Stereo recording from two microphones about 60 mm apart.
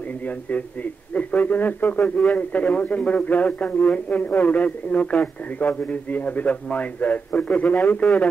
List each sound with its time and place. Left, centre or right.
1.1 s a man's voice: left